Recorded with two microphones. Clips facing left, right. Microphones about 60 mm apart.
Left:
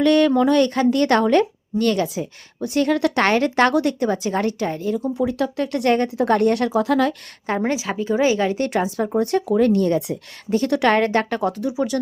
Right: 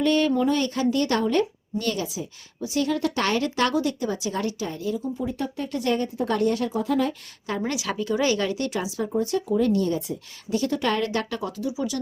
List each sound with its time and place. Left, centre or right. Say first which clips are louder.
0.0 s speech: left 6 dB; left
3.2 s speech: left 7 dB; left
3.8 s speech: left 6 dB; left
4.9 s speech: left 7 dB; left
7.4 s speech: left 6 dB; left
7.7 s speech: left 4 dB; left
8.4 s speech: left 6 dB; left
10.7 s speech: left 9 dB; left
10.9 s speech: left 7 dB; left